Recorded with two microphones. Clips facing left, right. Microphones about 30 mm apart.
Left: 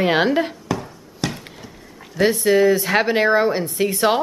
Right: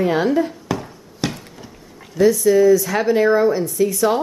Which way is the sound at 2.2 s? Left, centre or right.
Left.